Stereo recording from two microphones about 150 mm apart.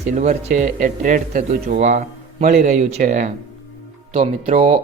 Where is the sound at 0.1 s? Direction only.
55° right (ahead or behind).